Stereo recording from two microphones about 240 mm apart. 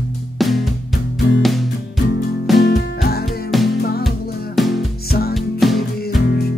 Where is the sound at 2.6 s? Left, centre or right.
Left.